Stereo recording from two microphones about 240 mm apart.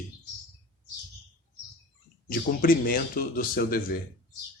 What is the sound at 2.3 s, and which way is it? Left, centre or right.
Speech, left.